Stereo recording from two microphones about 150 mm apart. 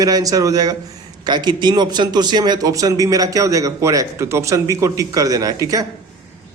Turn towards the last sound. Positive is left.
turn(degrees=-25)  # may be behind; listen again after turning